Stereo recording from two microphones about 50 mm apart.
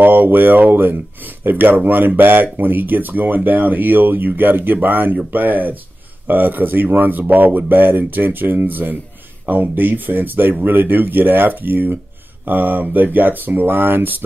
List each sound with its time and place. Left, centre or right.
0.0 s speech: right